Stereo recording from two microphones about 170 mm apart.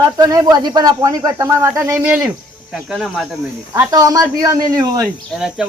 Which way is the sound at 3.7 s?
20° right (ahead or behind).